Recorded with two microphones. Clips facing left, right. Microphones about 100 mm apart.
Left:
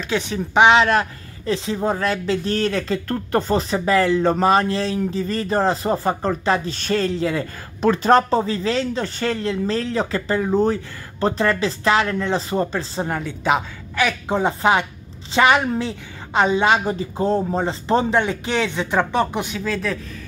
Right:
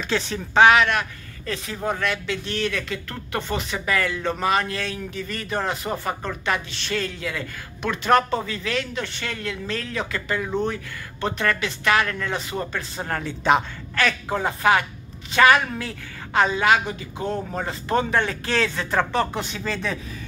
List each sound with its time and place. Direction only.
0.1 s speech: 15° left (ahead or behind); by 13.1 s 30° left (ahead or behind)
13.1 s a woman's voice: 5° left (ahead or behind)
14.0 s speech: 20° left (ahead or behind)
16.8 s speech: 35° left (ahead or behind); by 19.5 s 15° left (ahead or behind)
19.5 s a woman's voice: 5° left (ahead or behind)